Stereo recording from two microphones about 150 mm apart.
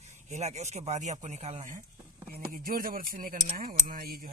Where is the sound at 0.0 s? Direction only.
50° right (ahead or behind).